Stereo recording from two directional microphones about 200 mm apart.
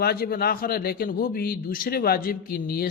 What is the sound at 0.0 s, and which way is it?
A man's voice, 50° left (ahead or behind).